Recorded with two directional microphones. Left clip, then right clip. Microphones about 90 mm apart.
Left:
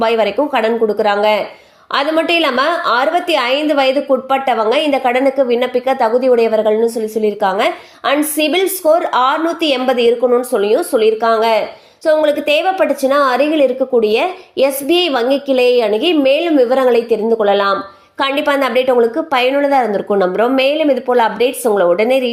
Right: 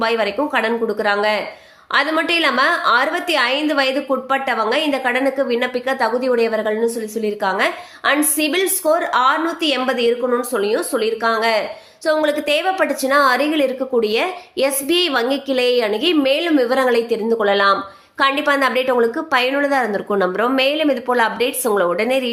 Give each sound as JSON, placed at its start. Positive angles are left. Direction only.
{"t": 0.0, "sound": "a woman's voice", "side_deg": 35}